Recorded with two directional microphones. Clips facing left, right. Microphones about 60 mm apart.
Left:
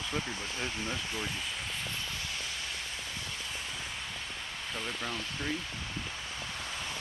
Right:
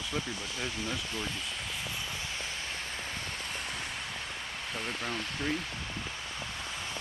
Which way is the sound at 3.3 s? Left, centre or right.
Right.